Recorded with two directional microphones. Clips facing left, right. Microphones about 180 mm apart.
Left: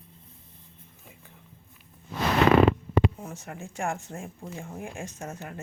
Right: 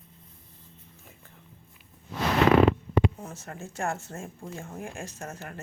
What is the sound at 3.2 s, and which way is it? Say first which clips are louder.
Speech: left 1 dB; 10° left (ahead or behind).